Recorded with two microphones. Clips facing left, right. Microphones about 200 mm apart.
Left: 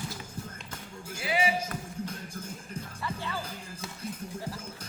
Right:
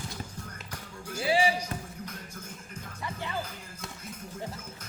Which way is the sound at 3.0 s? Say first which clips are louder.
Even; 15° right (ahead or behind).